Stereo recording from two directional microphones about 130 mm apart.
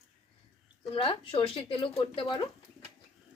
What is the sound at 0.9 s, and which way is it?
Speech, 45° left (ahead or behind).